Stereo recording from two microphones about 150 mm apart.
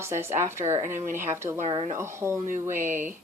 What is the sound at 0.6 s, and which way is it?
Speech, 50° right (ahead or behind).